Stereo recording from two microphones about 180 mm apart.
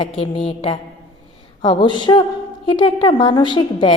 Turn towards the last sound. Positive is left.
turn(degrees=25)  # may be behind; listen again after turning